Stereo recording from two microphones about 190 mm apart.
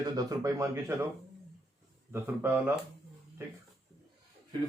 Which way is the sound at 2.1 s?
10° right (ahead or behind).